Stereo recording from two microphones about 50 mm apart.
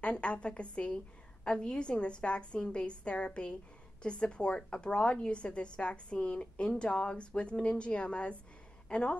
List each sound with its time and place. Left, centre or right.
0.0 s a woman's voice: left